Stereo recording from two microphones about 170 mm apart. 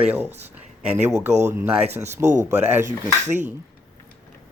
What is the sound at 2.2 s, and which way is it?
Speech, 45° right (ahead or behind).